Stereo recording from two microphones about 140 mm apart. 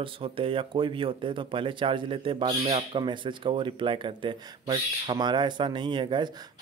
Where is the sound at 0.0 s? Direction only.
40° right (ahead or behind).